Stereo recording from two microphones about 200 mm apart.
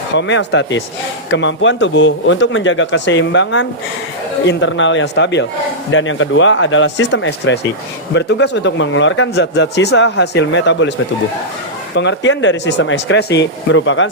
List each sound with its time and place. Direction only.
0.1 s a man's voice: 65° left (ahead or behind)
5.9 s a man's voice: 75° left (ahead or behind)
11.9 s a man's voice: 65° left (ahead or behind)